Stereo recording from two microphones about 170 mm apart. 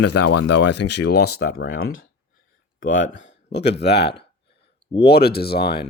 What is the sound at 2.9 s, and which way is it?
Speech, 90° left.